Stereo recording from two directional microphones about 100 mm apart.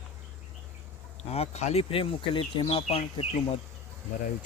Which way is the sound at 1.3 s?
90° left.